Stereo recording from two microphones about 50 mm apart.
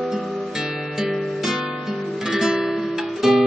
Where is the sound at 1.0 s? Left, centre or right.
Centre.